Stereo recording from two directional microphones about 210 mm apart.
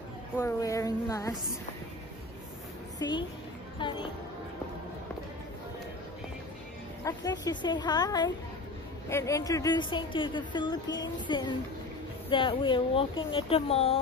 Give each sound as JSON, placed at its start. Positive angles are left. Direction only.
{"t": 0.4, "sound": "speech", "side_deg": 15}
{"t": 3.0, "sound": "a woman's voice", "side_deg": 20}
{"t": 7.1, "sound": "speech", "side_deg": 20}